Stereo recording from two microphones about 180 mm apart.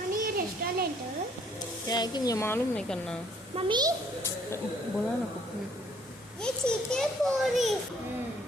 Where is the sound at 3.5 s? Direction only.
25° right (ahead or behind).